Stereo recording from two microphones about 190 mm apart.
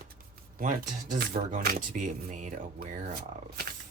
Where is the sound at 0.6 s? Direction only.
45° right (ahead or behind).